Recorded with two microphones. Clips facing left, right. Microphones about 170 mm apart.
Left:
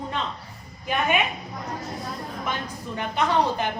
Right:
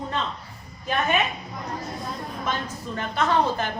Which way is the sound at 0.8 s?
15° left (ahead or behind).